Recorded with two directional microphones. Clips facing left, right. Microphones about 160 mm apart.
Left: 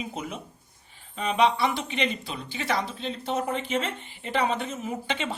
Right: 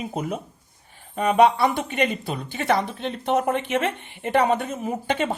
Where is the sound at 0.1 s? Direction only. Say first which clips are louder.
Right 7 dB; 45° right (ahead or behind).